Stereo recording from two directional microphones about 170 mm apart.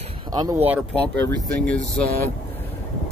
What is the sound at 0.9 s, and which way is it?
Speech, 5° left (ahead or behind).